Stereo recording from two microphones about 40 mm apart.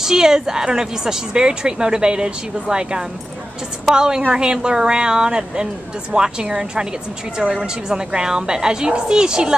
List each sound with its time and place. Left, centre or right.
0.0 s a woman's voice: centre